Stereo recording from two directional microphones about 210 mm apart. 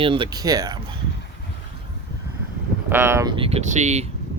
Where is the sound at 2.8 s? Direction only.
10° right (ahead or behind); by 4.0 s 35° right (ahead or behind).